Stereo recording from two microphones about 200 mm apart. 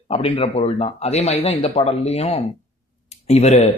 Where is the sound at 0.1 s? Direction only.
30° left (ahead or behind).